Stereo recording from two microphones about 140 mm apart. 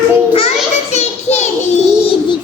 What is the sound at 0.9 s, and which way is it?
Child singing, 55° left (ahead or behind).